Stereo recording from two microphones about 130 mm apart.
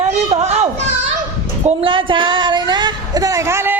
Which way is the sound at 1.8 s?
40° right (ahead or behind).